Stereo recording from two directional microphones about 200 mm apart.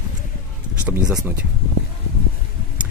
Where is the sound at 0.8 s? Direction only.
10° right (ahead or behind).